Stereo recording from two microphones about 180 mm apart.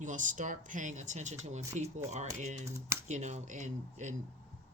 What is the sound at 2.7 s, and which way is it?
Speech, 15° right (ahead or behind).